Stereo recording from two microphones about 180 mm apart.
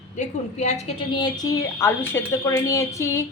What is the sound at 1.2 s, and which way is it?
A woman's voice, 20° left (ahead or behind).